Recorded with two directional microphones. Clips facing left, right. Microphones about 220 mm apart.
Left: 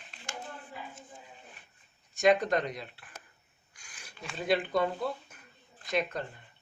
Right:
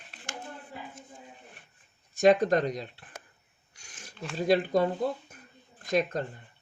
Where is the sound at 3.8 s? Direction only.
45° right (ahead or behind).